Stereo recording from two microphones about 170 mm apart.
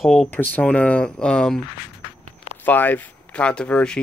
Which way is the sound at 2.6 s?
10° left (ahead or behind).